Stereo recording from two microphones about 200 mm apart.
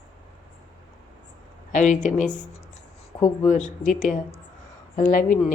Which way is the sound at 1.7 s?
40° left (ahead or behind).